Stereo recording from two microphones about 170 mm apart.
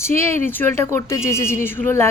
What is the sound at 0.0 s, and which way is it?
A woman's voice, 15° left (ahead or behind).